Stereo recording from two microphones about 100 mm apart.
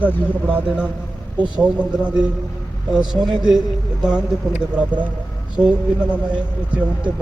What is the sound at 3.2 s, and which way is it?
Speech, 45° right (ahead or behind).